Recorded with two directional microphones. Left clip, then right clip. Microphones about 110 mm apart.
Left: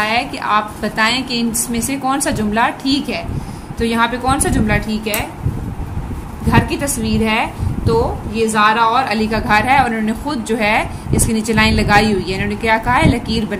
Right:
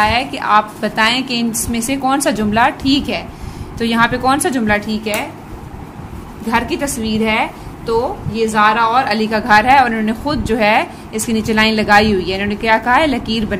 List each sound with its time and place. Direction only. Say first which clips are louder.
0.0 s a woman's voice: right 2 dB; 40° right (ahead or behind)
6.5 s a woman's voice: even; 20° right (ahead or behind); by 13.6 s 45° right (ahead or behind)